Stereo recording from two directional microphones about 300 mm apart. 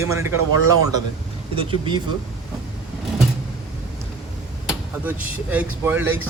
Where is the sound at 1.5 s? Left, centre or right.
Centre.